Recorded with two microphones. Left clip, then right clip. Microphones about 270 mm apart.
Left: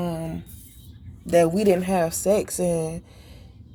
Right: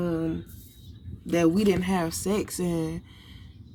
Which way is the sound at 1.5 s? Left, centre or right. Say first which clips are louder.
Left 5 dB; centre.